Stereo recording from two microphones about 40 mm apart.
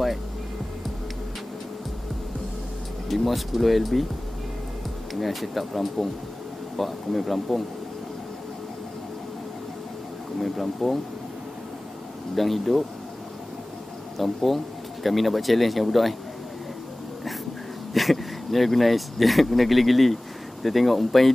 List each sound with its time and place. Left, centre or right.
3.1 s speech: centre
5.2 s speech: centre
10.4 s speech: centre
12.4 s speech: centre
14.1 s speech: centre
17.9 s speech: centre